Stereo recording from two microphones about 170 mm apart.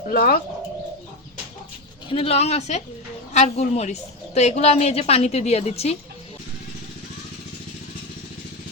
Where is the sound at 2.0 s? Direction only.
30° left (ahead or behind).